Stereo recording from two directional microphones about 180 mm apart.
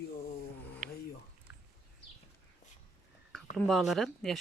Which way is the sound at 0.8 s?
45° right (ahead or behind).